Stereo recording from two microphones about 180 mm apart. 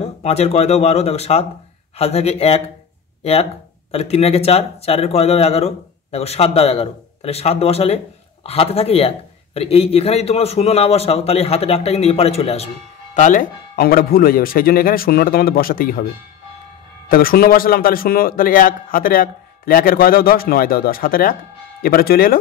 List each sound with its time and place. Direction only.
0.0 s speech: 35° left (ahead or behind)
3.9 s speech: 35° left (ahead or behind); by 16.1 s 55° left (ahead or behind)
17.1 s a man's voice: 55° left (ahead or behind)